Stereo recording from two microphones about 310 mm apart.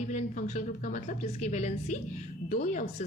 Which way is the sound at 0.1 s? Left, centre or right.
Left.